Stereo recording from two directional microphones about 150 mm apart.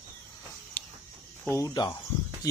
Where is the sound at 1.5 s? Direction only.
20° left (ahead or behind).